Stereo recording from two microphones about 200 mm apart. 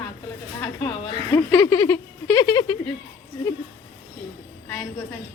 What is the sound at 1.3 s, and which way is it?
Speech, 15° left (ahead or behind).